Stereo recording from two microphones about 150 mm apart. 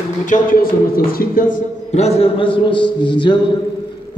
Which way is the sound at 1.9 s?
45° left (ahead or behind).